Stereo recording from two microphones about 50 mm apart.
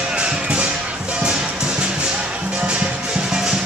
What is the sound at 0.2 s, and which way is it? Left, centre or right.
Music, right.